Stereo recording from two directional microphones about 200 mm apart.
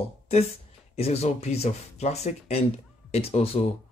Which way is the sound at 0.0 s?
30° left (ahead or behind).